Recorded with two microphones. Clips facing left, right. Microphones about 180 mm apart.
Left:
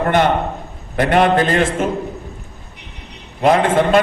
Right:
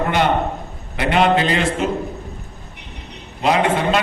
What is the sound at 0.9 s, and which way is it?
Speech, 50° left (ahead or behind).